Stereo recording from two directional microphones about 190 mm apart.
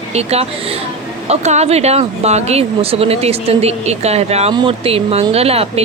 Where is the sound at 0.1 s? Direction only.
35° right (ahead or behind).